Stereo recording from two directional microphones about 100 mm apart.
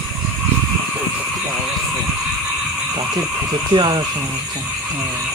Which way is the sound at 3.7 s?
50° right (ahead or behind).